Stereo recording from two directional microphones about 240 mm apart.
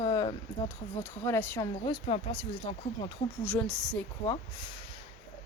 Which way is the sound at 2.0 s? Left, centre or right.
Left.